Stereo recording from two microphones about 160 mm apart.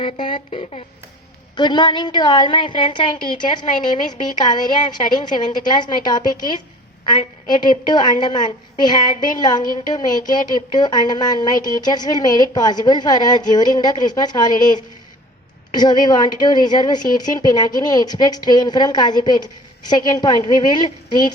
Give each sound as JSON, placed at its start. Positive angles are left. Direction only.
{"t": 0.0, "sound": "a woman's voice", "side_deg": 35}
{"t": 15.7, "sound": "a woman's voice", "side_deg": 25}